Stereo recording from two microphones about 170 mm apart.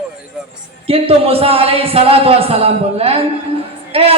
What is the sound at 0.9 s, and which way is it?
Speech, 35° right (ahead or behind).